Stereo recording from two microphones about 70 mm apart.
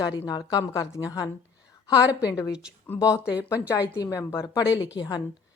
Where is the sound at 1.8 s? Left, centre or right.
Left.